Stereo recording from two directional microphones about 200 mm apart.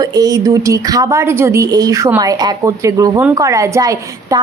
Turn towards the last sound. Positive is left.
turn(degrees=-15)  # may be behind; listen again after turning